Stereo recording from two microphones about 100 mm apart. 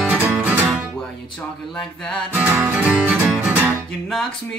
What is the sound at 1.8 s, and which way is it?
Music, 5° left (ahead or behind).